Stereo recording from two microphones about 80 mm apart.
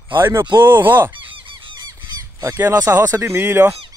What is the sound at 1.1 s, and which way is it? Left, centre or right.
Honk, right.